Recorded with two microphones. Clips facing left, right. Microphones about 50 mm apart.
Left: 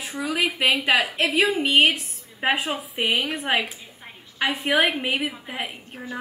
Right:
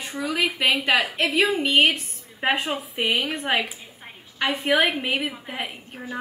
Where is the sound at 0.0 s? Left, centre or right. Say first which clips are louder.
Even; centre.